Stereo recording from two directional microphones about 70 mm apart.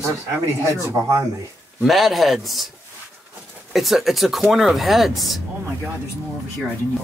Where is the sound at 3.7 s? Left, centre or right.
Centre.